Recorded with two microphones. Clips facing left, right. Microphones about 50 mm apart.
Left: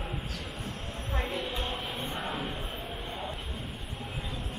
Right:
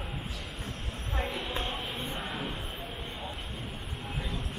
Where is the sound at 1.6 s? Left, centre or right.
Right.